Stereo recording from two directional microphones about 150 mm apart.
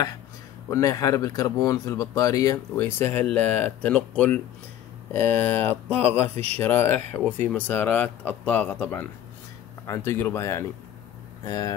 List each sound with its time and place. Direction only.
0.7 s speech: 20° left (ahead or behind)
6.3 s speech: 45° right (ahead or behind)
6.6 s speech: 15° left (ahead or behind)